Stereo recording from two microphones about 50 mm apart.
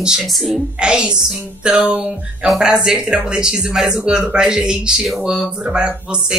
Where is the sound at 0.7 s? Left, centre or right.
Centre.